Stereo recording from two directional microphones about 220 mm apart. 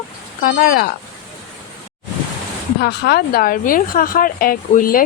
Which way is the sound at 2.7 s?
45° left (ahead or behind).